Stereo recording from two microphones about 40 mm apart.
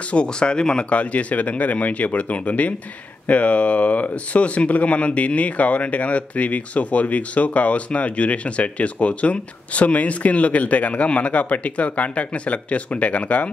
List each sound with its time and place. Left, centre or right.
0.1 s speech: left